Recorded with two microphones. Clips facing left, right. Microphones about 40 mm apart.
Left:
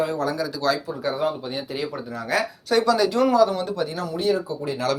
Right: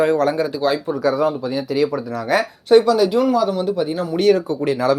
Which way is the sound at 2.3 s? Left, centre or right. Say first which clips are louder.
Right 5 dB; right.